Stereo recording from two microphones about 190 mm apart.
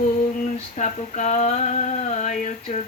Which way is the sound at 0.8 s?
40° left (ahead or behind).